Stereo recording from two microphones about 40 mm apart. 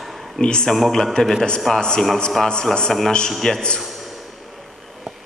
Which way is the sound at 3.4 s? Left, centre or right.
Left.